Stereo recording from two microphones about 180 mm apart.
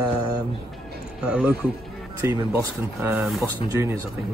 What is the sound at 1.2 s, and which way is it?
Speech, 5° right (ahead or behind).